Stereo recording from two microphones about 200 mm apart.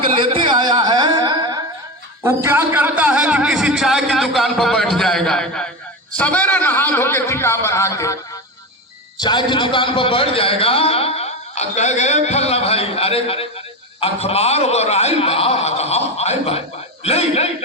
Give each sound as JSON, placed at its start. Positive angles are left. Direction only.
{"t": 0.2, "sound": "a sound", "side_deg": -25}
{"t": 2.2, "sound": "a man's voice", "side_deg": -10}
{"t": 9.2, "sound": "a man's voice", "side_deg": 25}